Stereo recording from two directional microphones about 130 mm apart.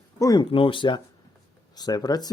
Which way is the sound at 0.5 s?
40° left (ahead or behind).